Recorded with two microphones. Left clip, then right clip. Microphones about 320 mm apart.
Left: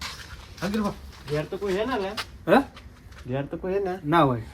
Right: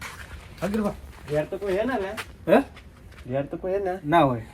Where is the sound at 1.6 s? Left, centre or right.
Centre.